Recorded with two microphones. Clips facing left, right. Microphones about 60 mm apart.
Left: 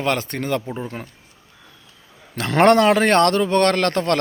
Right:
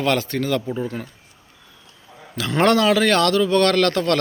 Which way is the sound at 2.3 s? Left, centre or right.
Left.